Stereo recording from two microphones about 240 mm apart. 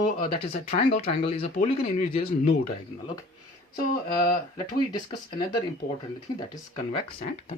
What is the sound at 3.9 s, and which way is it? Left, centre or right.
Speech, left.